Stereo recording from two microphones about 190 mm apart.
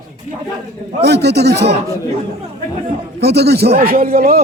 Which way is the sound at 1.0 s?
60° right (ahead or behind).